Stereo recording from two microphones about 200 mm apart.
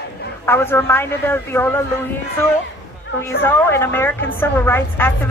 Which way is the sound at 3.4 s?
10° left (ahead or behind).